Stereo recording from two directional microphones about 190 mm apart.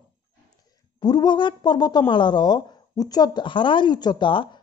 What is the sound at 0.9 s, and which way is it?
Speech, 20° left (ahead or behind).